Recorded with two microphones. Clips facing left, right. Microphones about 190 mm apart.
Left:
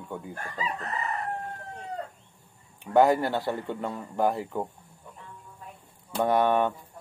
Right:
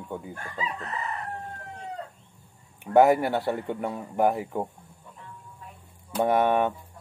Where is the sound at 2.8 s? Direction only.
20° right (ahead or behind).